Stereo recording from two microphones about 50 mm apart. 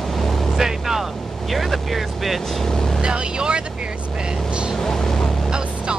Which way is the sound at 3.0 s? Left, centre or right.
Centre.